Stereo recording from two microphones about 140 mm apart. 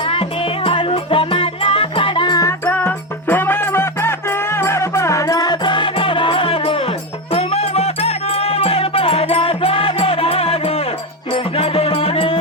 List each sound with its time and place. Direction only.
0.1 s music: 40° left (ahead or behind)
2.7 s music: 15° left (ahead or behind); by 12.4 s 40° left (ahead or behind)